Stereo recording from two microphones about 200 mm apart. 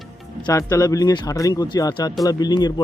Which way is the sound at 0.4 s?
15° left (ahead or behind).